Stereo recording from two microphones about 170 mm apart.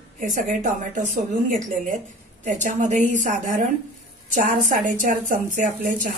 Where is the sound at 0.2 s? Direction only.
50° right (ahead or behind).